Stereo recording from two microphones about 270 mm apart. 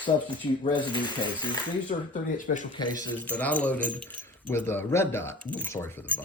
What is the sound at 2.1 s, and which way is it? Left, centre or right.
Speech, left.